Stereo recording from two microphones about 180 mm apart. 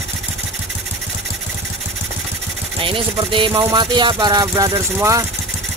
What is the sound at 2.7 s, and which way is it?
Speech, 30° right (ahead or behind).